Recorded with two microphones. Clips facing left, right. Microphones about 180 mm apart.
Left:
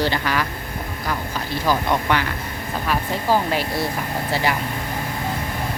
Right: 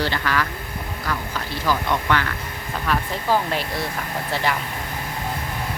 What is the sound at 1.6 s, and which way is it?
Speech, 15° left (ahead or behind).